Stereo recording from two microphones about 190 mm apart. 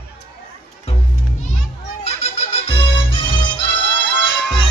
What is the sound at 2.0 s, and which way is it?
Music, 35° left (ahead or behind).